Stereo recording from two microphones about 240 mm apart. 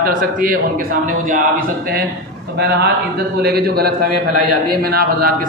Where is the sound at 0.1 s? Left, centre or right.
Right.